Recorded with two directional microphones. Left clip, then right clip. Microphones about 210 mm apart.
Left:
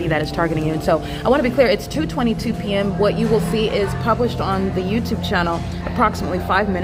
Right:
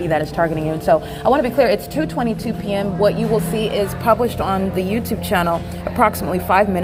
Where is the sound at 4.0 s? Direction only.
25° right (ahead or behind).